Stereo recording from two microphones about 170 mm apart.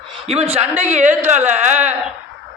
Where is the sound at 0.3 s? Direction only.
35° right (ahead or behind).